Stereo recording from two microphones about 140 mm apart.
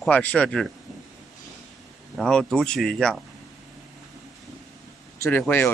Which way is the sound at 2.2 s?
5° left (ahead or behind).